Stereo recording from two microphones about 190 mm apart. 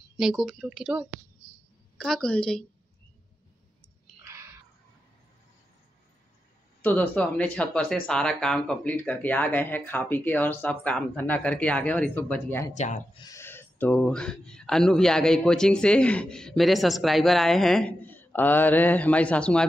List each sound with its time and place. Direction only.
0.2 s speech: centre (ahead or behind)
4.3 s a sound: 15° right (ahead or behind)
6.8 s speech: 10° left (ahead or behind)
12.7 s speech: 40° left (ahead or behind)
13.2 s speech: 15° left (ahead or behind)